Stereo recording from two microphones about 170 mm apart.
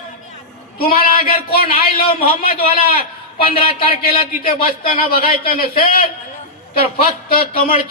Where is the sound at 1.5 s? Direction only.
60° left (ahead or behind).